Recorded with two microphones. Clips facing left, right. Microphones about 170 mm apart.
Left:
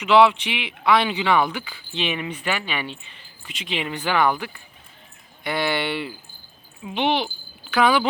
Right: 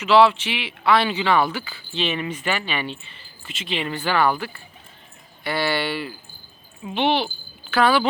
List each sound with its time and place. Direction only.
0.0 s speech: 15° left (ahead or behind)